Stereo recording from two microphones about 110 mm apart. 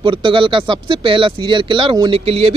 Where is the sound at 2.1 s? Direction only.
60° right (ahead or behind).